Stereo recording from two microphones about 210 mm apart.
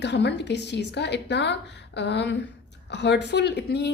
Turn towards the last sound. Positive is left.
turn(degrees=50)  # may be behind; listen again after turning